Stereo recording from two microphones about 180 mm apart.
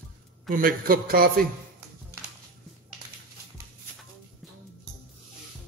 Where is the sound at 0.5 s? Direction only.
50° right (ahead or behind).